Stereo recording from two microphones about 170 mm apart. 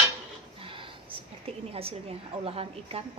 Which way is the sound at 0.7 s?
30° right (ahead or behind).